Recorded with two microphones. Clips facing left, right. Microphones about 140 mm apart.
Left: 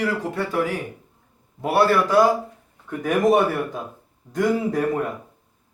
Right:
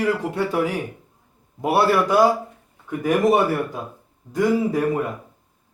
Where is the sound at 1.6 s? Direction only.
20° right (ahead or behind).